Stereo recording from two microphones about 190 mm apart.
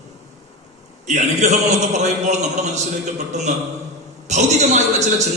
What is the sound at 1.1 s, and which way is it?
A man's voice, 40° right (ahead or behind).